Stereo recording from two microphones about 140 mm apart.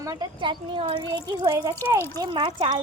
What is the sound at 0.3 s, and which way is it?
Speech, 35° right (ahead or behind).